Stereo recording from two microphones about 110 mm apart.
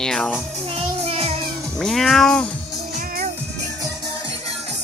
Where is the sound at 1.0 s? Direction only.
65° right (ahead or behind).